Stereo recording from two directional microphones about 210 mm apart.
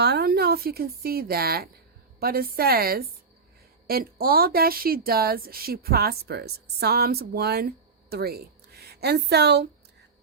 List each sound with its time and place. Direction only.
0.0 s speech: 50° right (ahead or behind)